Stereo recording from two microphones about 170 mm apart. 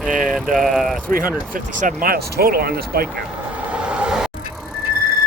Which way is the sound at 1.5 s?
55° right (ahead or behind).